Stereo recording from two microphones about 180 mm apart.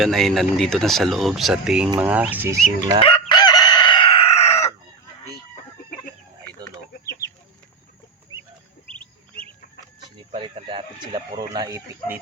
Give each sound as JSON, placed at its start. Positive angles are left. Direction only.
{"t": 0.0, "sound": "speech", "side_deg": 0}
{"t": 3.0, "sound": "chicken", "side_deg": 25}
{"t": 10.3, "sound": "a sound", "side_deg": -30}